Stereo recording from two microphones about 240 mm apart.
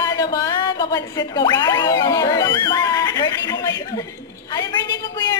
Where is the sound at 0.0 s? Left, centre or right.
Centre.